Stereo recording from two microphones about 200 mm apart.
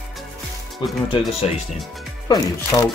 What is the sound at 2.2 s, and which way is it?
Speech, 20° left (ahead or behind).